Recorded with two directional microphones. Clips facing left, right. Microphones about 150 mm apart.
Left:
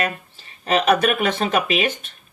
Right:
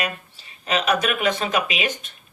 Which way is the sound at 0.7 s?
50° left (ahead or behind).